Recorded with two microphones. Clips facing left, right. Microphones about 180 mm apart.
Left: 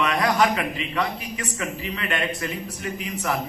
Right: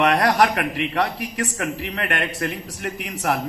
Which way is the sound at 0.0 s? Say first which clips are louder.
Right 3 dB; 65° right (ahead or behind).